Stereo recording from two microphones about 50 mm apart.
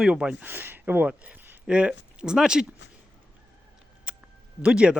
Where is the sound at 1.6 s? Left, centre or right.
Centre.